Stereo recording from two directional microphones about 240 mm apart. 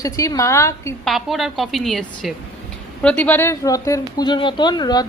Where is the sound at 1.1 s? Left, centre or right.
Centre.